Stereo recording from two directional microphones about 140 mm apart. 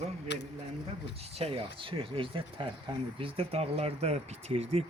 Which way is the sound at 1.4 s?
40° right (ahead or behind).